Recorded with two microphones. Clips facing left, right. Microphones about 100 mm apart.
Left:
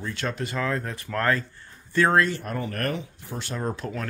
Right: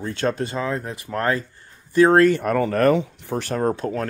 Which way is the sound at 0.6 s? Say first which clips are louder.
Right 2 dB; 15° right (ahead or behind).